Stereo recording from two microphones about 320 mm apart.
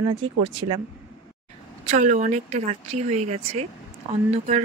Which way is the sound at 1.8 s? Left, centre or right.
Right.